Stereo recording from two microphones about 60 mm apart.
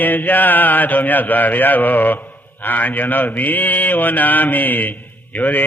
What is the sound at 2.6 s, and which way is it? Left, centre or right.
Speech, left.